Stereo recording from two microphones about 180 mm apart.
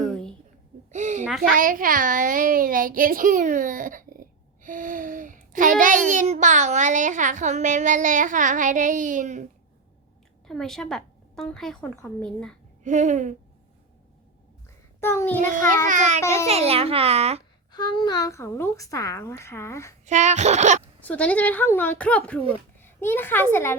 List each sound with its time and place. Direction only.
0.0 s a sound: 5° left (ahead or behind)
0.9 s a sound: 45° right (ahead or behind)
1.2 s a child's voice: centre (ahead or behind)
1.5 s a child's voice: 50° right (ahead or behind)
10.4 s a woman's voice: centre (ahead or behind)
12.8 s a child's voice: 40° right (ahead or behind)
15.0 s speech: 15° left (ahead or behind)
15.9 s a child's voice: 40° right (ahead or behind)
16.2 s speech: 15° left (ahead or behind)
16.5 s a child's voice: 35° right (ahead or behind)
17.7 s speech: 25° left (ahead or behind)
20.1 s a child's voice: 40° right (ahead or behind)
21.0 s speech: 10° left (ahead or behind)